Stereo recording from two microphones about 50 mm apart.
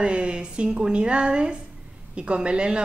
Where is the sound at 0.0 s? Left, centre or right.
Right.